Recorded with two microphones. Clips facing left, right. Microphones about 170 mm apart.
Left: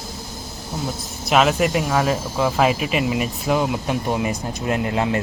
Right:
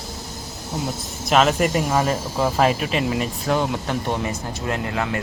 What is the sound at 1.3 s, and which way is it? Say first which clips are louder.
Speech: even; centre (ahead or behind).